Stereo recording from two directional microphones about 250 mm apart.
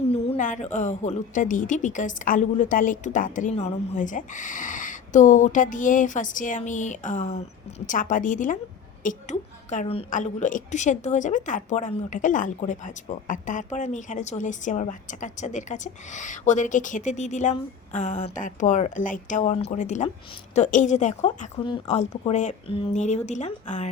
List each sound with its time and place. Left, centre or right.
0.1 s a woman's voice: left